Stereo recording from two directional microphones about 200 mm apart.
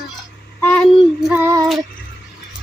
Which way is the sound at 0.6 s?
10° left (ahead or behind).